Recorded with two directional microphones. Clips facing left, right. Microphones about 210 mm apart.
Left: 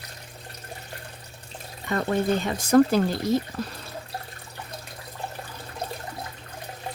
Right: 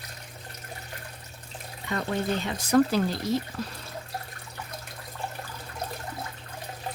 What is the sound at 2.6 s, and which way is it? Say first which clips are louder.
Speech: left 4 dB; 50° left (ahead or behind).